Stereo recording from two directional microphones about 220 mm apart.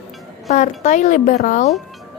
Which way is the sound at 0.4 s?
30° left (ahead or behind).